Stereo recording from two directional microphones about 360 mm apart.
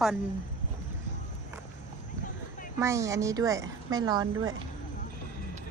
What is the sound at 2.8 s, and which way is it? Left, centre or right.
A woman's voice, centre.